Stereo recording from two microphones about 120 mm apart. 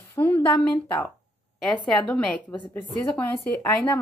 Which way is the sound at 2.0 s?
10° left (ahead or behind).